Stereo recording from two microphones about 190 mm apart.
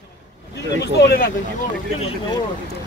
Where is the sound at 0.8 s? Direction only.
55° left (ahead or behind).